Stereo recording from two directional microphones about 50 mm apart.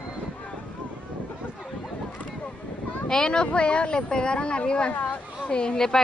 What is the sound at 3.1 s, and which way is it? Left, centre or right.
A woman's voice, centre.